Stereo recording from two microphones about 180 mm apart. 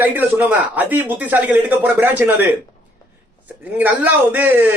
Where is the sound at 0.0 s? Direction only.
10° right (ahead or behind).